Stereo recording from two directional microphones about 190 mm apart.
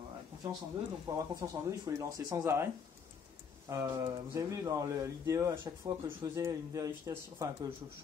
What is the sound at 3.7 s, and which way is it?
Speech, 15° right (ahead or behind).